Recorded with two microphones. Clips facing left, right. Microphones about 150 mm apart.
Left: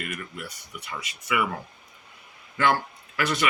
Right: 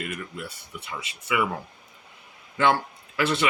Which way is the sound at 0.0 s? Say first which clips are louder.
Right 2 dB; 25° right (ahead or behind).